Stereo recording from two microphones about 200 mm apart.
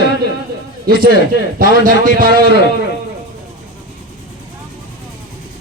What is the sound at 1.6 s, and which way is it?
Speech, 45° right (ahead or behind).